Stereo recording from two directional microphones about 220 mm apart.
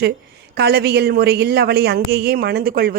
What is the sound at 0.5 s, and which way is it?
Speech, 45° right (ahead or behind).